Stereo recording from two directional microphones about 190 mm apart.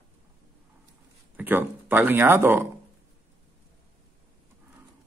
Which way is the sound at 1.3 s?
10° right (ahead or behind).